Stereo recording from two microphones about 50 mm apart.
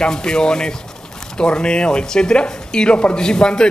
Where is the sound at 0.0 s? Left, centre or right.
Centre.